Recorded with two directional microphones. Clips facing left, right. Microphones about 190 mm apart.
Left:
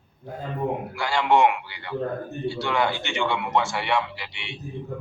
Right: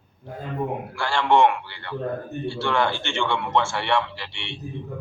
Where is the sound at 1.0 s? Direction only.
15° left (ahead or behind).